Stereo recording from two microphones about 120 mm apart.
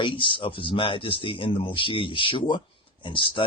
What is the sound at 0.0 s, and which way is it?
Speech, 45° left (ahead or behind).